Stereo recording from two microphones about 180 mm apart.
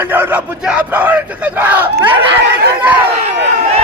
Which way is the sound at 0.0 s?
10° right (ahead or behind).